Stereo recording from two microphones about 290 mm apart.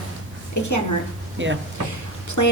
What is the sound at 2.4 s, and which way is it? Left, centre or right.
Speech, left.